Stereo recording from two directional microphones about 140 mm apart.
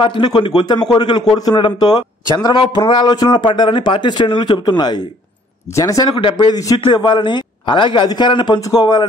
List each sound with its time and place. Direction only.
0.0 s a man's voice: 35° left (ahead or behind)